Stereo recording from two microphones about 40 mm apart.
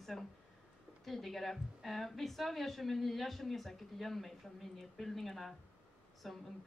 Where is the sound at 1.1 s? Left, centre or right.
Centre.